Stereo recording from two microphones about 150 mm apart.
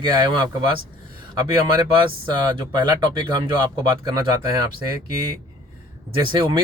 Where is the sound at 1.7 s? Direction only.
30° right (ahead or behind).